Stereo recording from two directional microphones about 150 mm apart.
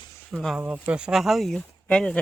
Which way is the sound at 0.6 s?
10° right (ahead or behind).